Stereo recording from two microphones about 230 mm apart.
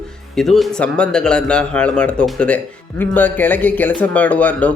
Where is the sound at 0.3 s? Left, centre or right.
Centre.